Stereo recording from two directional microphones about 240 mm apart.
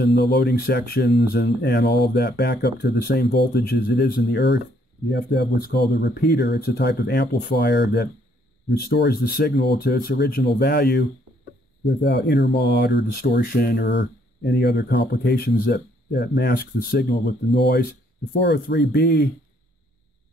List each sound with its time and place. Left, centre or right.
0.0 s speech: left